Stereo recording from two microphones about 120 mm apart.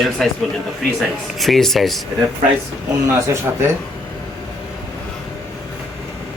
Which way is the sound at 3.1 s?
25° right (ahead or behind).